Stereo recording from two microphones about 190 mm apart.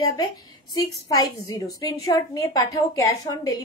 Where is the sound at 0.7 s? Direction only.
20° left (ahead or behind).